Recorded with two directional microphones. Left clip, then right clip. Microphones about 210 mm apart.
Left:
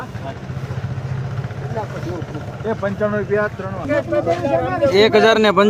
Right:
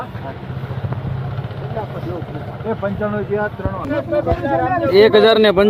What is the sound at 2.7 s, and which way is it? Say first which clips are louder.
Speech: left 1 dB; 5° left (ahead or behind).